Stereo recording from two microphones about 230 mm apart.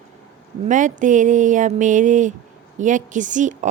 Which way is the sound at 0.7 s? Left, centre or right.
Right.